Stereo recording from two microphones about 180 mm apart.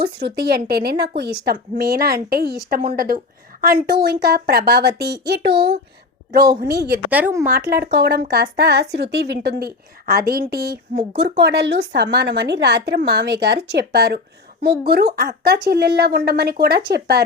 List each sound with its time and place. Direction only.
0.0 s speech: 65° right (ahead or behind)
6.6 s speech: 65° right (ahead or behind)
7.1 s speech: 10° right (ahead or behind)
7.5 s speech: 60° right (ahead or behind)